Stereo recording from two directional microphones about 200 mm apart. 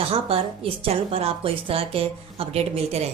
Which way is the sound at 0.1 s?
30° right (ahead or behind).